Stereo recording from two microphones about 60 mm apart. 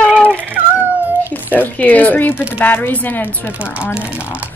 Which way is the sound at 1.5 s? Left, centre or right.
Left.